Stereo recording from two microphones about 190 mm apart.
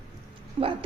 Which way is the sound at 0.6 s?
25° right (ahead or behind).